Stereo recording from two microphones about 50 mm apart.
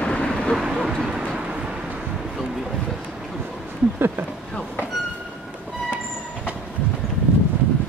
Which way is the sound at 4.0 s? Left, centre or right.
Right.